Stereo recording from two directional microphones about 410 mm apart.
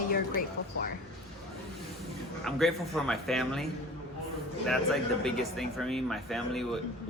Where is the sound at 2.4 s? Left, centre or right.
Centre.